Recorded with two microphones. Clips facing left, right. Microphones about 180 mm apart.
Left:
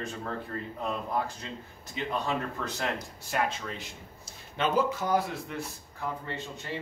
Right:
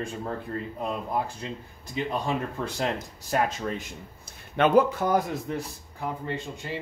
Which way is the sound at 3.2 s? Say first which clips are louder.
Right 5 dB; 40° right (ahead or behind).